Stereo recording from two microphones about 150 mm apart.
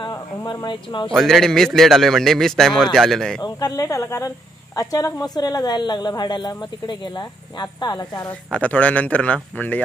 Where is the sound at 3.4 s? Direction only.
25° left (ahead or behind).